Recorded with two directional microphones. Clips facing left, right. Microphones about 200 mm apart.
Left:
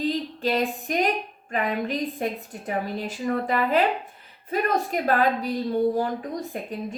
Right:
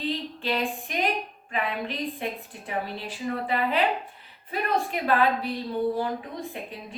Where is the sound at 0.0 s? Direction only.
40° left (ahead or behind).